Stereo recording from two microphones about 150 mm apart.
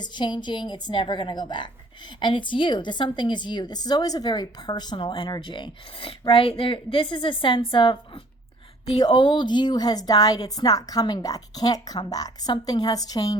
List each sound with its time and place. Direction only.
0.0 s a woman's voice: 30° left (ahead or behind)